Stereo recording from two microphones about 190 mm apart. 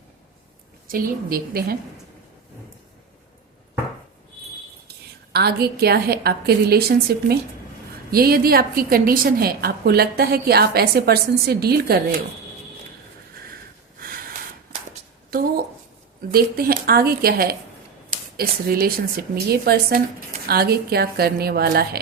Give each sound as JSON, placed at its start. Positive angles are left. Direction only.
{"t": 0.9, "sound": "speech", "side_deg": -50}
{"t": 5.3, "sound": "a woman's voice", "side_deg": -55}
{"t": 14.0, "sound": "snort", "side_deg": -50}
{"t": 15.3, "sound": "a woman's voice", "side_deg": -50}